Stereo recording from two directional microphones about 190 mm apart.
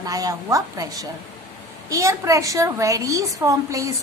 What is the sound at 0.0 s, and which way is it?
A woman's voice, 20° right (ahead or behind).